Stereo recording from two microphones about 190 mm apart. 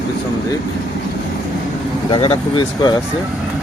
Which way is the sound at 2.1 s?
25° left (ahead or behind).